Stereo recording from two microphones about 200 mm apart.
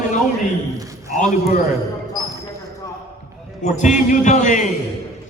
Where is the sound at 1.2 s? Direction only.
45° left (ahead or behind).